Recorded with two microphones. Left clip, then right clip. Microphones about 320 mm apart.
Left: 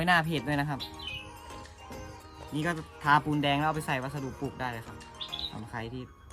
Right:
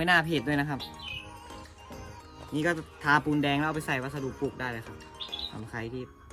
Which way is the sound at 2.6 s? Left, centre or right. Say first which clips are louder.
Even; centre.